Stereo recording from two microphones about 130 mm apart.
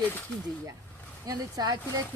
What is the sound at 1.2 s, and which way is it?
Speech, 30° right (ahead or behind).